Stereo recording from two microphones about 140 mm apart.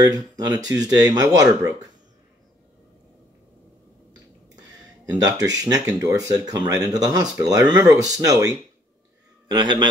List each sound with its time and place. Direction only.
0.0 s speech: 30° right (ahead or behind)
4.6 s a man's voice: 30° right (ahead or behind)